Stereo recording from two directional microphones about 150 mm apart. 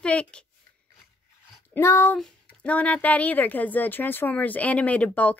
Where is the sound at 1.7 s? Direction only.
20° left (ahead or behind).